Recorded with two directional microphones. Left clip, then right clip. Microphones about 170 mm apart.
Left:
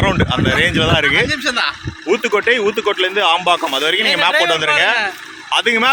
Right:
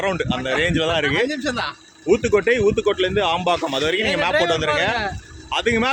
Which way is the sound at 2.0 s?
5° left (ahead or behind).